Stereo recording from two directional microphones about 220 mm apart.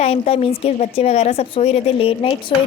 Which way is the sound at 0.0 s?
30° left (ahead or behind).